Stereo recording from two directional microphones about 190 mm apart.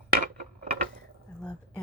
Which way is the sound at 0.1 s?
50° right (ahead or behind).